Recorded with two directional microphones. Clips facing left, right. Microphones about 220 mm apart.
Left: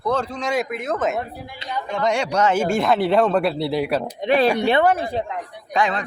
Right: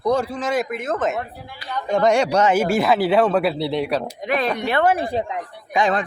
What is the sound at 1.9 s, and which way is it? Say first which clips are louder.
Speech: right 5 dB; 45° right (ahead or behind).